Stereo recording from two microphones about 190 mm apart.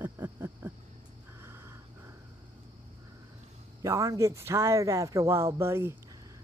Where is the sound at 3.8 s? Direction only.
15° right (ahead or behind).